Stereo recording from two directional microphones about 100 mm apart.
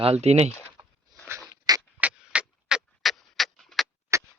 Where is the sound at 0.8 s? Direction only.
40° right (ahead or behind).